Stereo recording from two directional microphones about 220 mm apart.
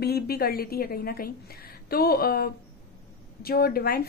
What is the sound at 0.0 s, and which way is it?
A woman's voice, 45° left (ahead or behind).